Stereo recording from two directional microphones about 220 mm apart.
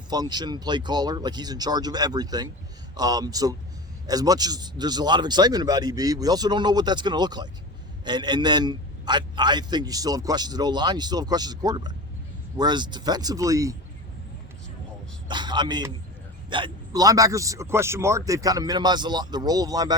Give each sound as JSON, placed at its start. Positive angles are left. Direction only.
{"t": 0.1, "sound": "a man's voice", "side_deg": -20}
{"t": 15.3, "sound": "a man's voice", "side_deg": -20}